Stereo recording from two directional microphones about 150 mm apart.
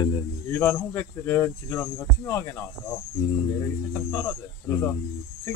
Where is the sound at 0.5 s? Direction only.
15° left (ahead or behind).